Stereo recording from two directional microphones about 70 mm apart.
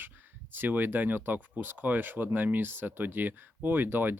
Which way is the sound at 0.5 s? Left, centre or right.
Right.